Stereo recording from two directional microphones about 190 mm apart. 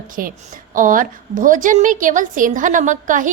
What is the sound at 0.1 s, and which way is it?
A woman's voice, 45° right (ahead or behind).